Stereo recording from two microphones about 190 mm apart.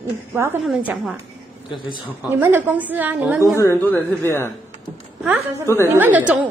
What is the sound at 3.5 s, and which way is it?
Speech, 10° left (ahead or behind).